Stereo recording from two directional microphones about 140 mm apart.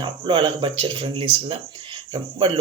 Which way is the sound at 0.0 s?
35° right (ahead or behind).